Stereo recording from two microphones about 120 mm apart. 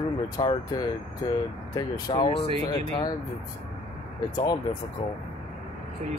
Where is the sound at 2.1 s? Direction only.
40° left (ahead or behind).